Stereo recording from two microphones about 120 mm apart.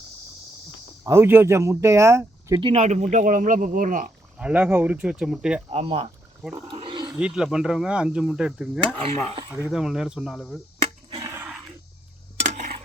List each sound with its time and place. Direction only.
1.0 s speech: 20° right (ahead or behind)
2.7 s speech: 75° right (ahead or behind)
4.4 s speech: 10° right (ahead or behind)
5.7 s speech: 55° right (ahead or behind)
6.7 s roaring cats: 45° right (ahead or behind)
7.2 s speech: 5° right (ahead or behind)
9.5 s speech: 20° right (ahead or behind)
9.7 s speech: 5° right (ahead or behind)
11.3 s a sound: 10° right (ahead or behind)
12.4 s a sound: 80° right